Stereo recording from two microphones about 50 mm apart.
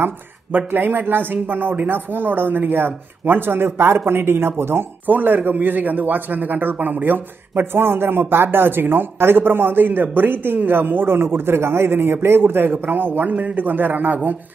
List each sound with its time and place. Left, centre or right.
0.0 s speech: right
5.0 s a man's voice: right
11.1 s speech: right